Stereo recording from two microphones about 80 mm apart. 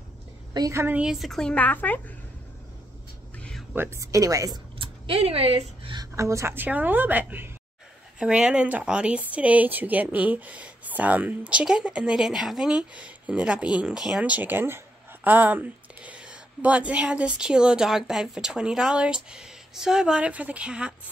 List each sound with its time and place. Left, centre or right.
0.5 s a woman's voice: right
1.1 s a woman's voice: centre
1.5 s a woman's voice: centre
3.7 s a woman's voice: right
4.0 s speech: right
6.1 s a woman's voice: right; by 20.9 s centre